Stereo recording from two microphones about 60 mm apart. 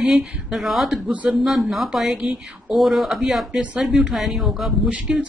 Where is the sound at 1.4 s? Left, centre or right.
Centre.